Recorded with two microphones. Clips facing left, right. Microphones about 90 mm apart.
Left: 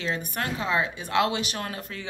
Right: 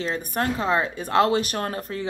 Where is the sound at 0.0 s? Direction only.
35° right (ahead or behind).